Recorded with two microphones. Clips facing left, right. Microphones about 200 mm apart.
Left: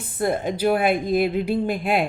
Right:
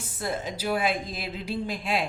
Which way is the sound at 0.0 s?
55° left (ahead or behind).